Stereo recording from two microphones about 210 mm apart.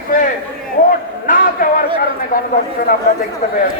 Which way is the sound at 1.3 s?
40° left (ahead or behind).